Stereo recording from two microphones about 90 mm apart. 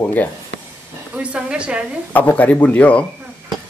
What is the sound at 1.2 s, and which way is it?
Speech, 10° right (ahead or behind).